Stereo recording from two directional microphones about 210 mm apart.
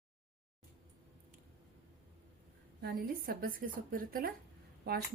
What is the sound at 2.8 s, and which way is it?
A woman's voice, 45° right (ahead or behind).